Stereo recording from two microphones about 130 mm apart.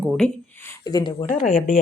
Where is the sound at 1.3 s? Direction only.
90° left.